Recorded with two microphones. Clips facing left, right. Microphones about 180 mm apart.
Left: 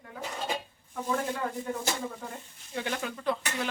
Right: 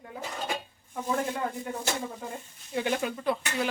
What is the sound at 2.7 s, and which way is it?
Speech, 15° right (ahead or behind).